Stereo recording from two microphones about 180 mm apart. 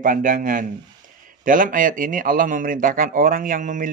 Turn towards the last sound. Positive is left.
turn(degrees=-45)  # may be behind; listen again after turning